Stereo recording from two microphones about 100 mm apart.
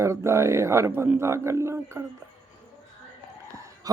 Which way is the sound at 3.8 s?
35° right (ahead or behind).